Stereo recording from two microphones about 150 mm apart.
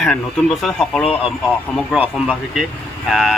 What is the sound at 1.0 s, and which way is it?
Speech, 40° left (ahead or behind).